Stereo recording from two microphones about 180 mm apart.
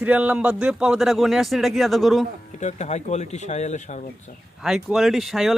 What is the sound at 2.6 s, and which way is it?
Speech, 40° left (ahead or behind).